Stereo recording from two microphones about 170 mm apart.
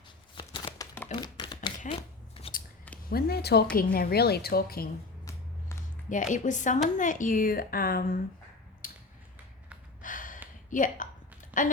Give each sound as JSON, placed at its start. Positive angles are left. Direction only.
{"t": 0.3, "sound": "a sound", "side_deg": 30}
{"t": 1.1, "sound": "typewriter", "side_deg": 25}
{"t": 1.9, "sound": "scissors", "side_deg": 35}
{"t": 3.1, "sound": "speech", "side_deg": 65}
{"t": 3.8, "sound": "speech", "side_deg": 60}
{"t": 6.1, "sound": "speech", "side_deg": 50}
{"t": 8.8, "sound": "a sound", "side_deg": 50}
{"t": 10.0, "sound": "a sound", "side_deg": 50}
{"t": 10.7, "sound": "speech", "side_deg": 50}